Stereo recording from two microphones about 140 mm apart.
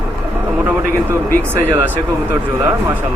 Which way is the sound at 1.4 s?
15° right (ahead or behind).